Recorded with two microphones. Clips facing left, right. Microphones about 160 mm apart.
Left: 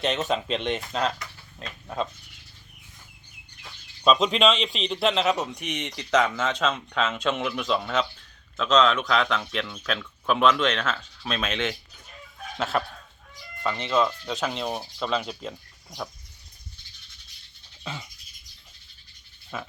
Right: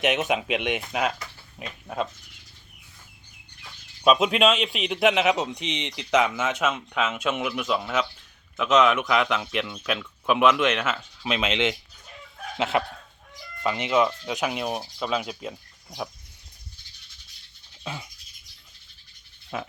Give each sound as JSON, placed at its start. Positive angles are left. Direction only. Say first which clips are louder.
{"t": 0.0, "sound": "a man's voice", "louder": "right 2 dB", "side_deg": -15}
{"t": 4.0, "sound": "a man's voice", "louder": "right 1 dB", "side_deg": -10}
{"t": 12.5, "sound": "dog", "louder": "right 2 dB", "side_deg": -15}
{"t": 13.6, "sound": "a man's voice", "louder": "right 2 dB", "side_deg": -15}
{"t": 17.8, "sound": "a man's voice", "louder": "right 1 dB", "side_deg": -10}